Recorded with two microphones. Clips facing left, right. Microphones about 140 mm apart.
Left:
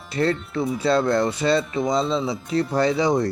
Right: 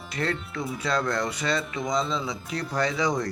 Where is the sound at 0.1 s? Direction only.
30° left (ahead or behind).